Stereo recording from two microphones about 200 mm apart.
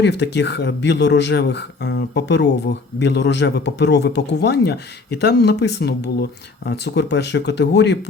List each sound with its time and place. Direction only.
0.0 s speech: 60° left (ahead or behind)